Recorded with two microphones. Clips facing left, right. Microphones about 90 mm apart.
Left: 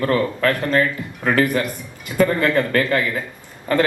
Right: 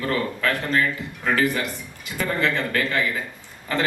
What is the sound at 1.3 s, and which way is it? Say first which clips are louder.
A man's voice: left 4 dB; 45° left (ahead or behind).